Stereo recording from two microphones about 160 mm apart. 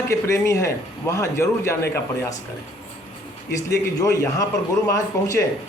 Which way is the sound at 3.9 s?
20° left (ahead or behind).